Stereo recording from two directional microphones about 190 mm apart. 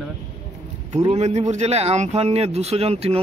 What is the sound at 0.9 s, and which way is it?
Speech, 35° right (ahead or behind).